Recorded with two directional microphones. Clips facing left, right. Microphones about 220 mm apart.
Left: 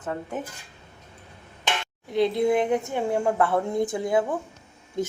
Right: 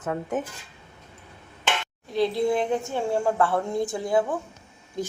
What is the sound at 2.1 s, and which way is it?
A woman's voice, 20° left (ahead or behind).